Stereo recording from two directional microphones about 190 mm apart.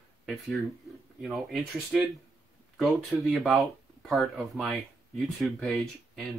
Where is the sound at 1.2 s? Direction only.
Centre (ahead or behind).